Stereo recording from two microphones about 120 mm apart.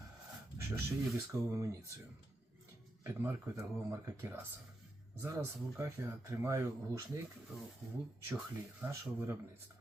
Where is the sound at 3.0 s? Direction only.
25° right (ahead or behind).